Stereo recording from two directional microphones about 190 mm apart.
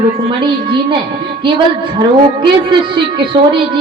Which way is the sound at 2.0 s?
25° right (ahead or behind).